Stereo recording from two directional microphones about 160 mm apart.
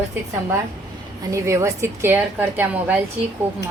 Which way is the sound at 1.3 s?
20° right (ahead or behind).